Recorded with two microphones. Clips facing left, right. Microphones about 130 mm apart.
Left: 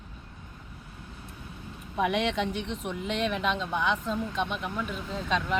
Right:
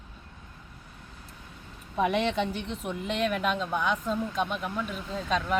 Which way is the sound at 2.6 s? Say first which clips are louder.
Even; 5° right (ahead or behind).